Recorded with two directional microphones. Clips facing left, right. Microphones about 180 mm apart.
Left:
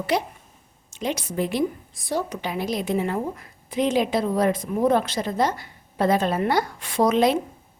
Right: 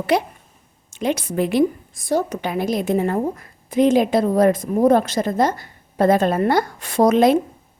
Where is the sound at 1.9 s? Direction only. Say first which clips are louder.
Right 6 dB; 45° right (ahead or behind).